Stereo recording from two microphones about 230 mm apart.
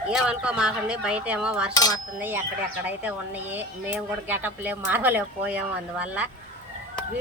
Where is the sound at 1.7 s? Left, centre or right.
Centre.